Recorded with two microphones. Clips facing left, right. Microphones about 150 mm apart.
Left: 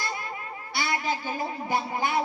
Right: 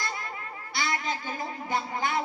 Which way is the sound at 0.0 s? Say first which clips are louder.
Left 2 dB; 20° left (ahead or behind).